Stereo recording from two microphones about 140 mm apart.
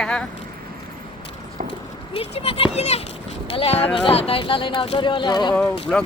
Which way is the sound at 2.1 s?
45° left (ahead or behind).